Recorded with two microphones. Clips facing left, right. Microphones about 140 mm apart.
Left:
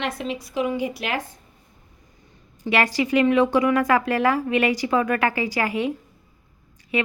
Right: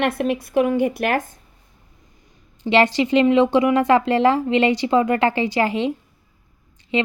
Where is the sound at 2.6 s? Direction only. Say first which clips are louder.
Right 5 dB; 25° right (ahead or behind).